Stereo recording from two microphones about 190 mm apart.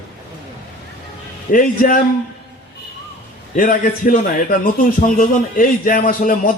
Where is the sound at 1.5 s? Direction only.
45° left (ahead or behind).